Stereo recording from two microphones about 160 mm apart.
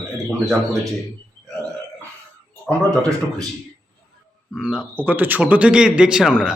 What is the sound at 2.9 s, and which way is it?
Speech, 20° right (ahead or behind).